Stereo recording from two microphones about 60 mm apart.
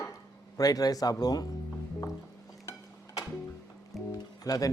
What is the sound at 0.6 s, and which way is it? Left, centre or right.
Speech, left.